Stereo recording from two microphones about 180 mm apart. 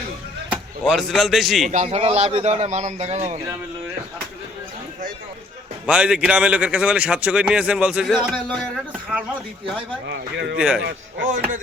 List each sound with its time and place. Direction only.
0.5 s speech: centre (ahead or behind)
1.7 s a man's voice: 40° right (ahead or behind)
5.8 s a man's voice: 5° right (ahead or behind)
10.1 s speech: 70° right (ahead or behind)
10.6 s a man's voice: 5° right (ahead or behind)